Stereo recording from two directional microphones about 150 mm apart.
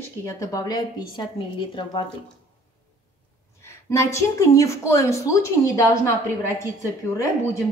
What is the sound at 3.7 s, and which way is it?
Speech, 20° left (ahead or behind).